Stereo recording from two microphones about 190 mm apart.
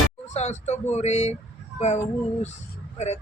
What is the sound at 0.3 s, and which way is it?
Speech, 35° left (ahead or behind).